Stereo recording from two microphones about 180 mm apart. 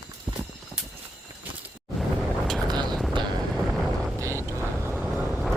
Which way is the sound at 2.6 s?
25° right (ahead or behind).